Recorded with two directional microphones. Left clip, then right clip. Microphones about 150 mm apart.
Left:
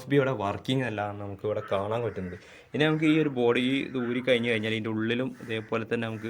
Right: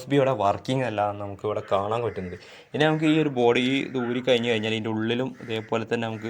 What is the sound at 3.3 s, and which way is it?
Speech, 5° right (ahead or behind).